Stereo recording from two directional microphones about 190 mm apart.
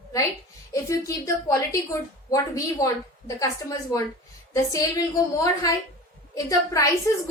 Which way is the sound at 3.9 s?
15° left (ahead or behind).